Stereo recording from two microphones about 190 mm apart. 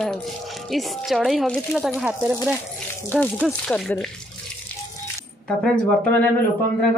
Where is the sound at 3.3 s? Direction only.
Centre (ahead or behind).